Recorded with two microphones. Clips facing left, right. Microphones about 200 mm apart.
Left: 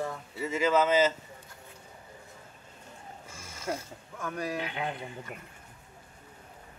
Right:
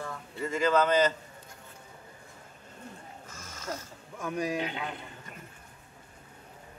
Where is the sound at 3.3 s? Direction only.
10° left (ahead or behind).